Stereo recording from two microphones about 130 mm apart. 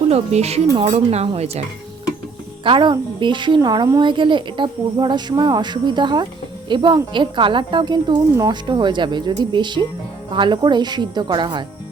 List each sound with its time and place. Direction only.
0.1 s speech: 55° right (ahead or behind)
2.6 s speech: 40° right (ahead or behind)